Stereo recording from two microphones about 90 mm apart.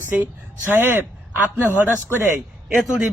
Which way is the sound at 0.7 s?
25° right (ahead or behind).